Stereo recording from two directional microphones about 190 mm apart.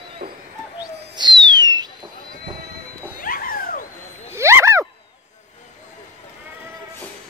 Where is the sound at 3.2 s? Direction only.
50° left (ahead or behind).